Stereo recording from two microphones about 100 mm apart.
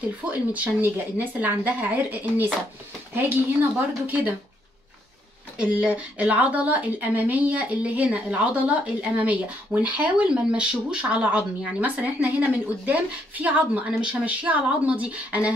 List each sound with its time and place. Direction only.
0.3 s a woman's voice: 15° right (ahead or behind)
5.6 s a woman's voice: 10° right (ahead or behind)